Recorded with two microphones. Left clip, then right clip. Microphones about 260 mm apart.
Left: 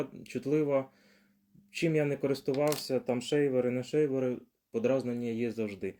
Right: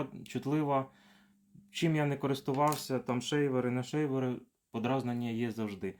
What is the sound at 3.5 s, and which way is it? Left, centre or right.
Speech, centre.